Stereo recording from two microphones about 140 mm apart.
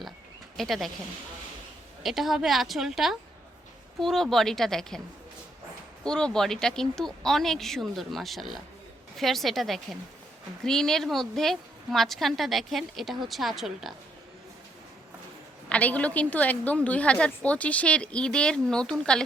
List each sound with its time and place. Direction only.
0.5 s a woman's voice: centre (ahead or behind)
2.0 s a woman's voice: centre (ahead or behind)
6.1 s a woman's voice: 5° left (ahead or behind)
15.7 s a woman's voice: 10° left (ahead or behind)